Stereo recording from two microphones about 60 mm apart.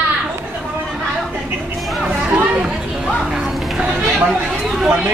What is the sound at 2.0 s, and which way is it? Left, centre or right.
Chatter, centre.